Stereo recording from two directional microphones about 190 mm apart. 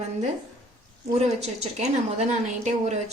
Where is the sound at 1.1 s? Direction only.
35° right (ahead or behind).